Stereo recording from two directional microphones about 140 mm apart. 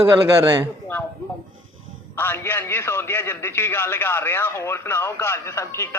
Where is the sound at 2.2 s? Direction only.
15° left (ahead or behind).